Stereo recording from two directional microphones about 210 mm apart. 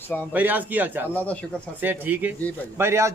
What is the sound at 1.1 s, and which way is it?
Speech, 5° left (ahead or behind).